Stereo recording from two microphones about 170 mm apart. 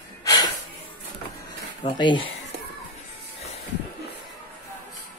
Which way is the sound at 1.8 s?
30° left (ahead or behind).